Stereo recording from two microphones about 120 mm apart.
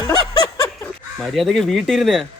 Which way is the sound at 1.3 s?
Centre (ahead or behind).